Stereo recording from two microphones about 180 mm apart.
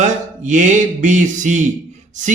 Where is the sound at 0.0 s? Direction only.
40° right (ahead or behind).